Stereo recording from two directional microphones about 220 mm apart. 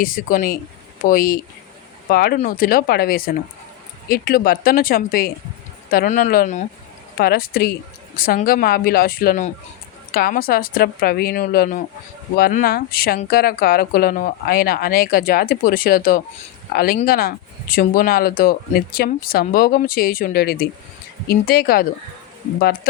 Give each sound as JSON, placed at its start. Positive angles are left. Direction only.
{"t": 0.0, "sound": "a woman's voice", "side_deg": 40}